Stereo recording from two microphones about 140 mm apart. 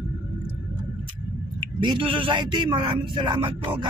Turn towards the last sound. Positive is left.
turn(degrees=-35)  # may be behind; listen again after turning